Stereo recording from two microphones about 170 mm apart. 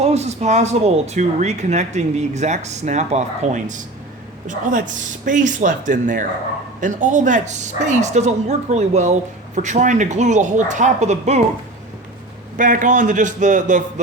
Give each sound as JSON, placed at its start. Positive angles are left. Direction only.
{"t": 0.0, "sound": "a woman's voice", "side_deg": -40}
{"t": 12.5, "sound": "a woman's voice", "side_deg": -50}